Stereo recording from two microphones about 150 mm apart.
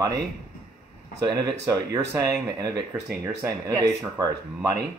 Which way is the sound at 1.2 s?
25° right (ahead or behind).